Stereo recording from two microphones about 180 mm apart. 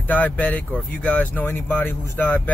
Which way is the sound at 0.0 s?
10° left (ahead or behind).